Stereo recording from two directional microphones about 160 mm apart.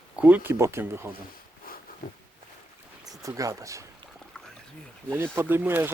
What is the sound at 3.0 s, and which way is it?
Speech, 20° right (ahead or behind).